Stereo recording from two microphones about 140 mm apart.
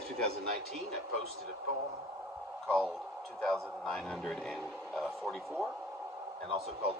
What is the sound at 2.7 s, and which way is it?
A man's voice, 5° left (ahead or behind).